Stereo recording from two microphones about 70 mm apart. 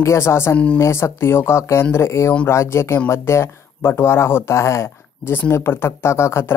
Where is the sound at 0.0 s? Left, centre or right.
Left.